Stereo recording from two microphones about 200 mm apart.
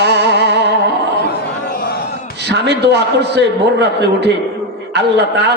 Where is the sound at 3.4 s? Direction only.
60° right (ahead or behind).